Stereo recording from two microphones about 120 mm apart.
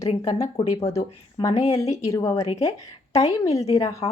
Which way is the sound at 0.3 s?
25° left (ahead or behind).